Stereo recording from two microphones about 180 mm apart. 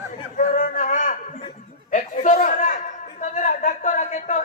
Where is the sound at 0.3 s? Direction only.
50° left (ahead or behind).